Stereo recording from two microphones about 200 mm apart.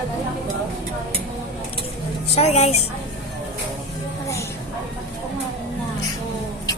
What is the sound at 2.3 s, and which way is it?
Speech, 30° left (ahead or behind).